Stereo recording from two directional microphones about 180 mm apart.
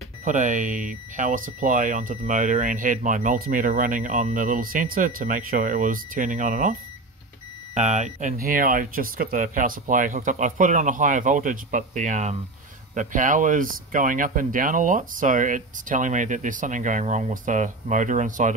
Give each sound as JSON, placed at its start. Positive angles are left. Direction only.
{"t": 0.2, "sound": "speech", "side_deg": -45}
{"t": 7.7, "sound": "speech", "side_deg": -40}